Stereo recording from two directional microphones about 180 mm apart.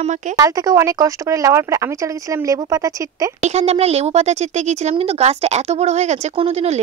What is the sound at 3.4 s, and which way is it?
Speech, 40° right (ahead or behind).